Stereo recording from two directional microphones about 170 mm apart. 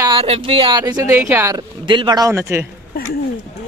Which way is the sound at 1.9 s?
25° right (ahead or behind).